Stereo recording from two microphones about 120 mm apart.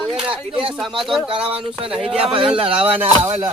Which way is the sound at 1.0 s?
Centre (ahead or behind).